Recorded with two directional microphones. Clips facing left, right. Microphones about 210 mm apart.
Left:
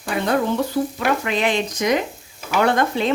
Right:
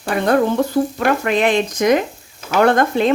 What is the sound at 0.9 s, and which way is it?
Speech, 50° right (ahead or behind).